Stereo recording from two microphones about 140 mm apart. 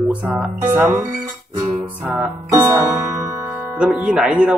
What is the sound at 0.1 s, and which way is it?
A man's voice, 10° right (ahead or behind).